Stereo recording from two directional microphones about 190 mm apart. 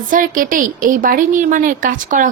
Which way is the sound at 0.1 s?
45° right (ahead or behind).